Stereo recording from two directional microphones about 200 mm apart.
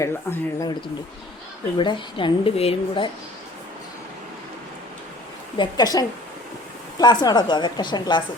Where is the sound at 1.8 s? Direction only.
25° left (ahead or behind).